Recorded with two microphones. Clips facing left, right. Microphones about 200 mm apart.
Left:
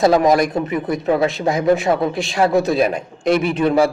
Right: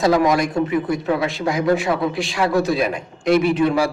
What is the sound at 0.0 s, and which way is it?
A man's voice, 25° left (ahead or behind).